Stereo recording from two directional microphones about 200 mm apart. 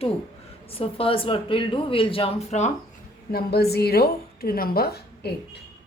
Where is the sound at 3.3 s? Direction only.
50° left (ahead or behind).